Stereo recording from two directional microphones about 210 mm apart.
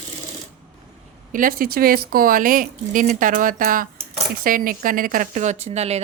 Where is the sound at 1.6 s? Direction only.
45° right (ahead or behind).